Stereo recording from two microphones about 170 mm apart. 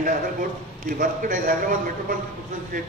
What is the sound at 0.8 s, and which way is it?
Speech, 55° right (ahead or behind).